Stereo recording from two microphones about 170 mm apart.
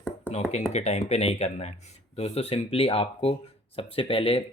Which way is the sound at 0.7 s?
40° left (ahead or behind).